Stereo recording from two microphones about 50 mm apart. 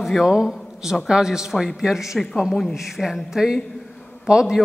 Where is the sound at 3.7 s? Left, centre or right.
Centre.